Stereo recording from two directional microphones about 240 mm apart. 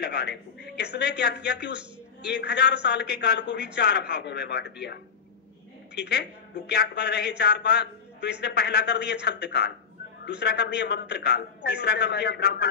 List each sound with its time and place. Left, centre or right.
0.0 s a man's voice: left
5.9 s a woman's voice: left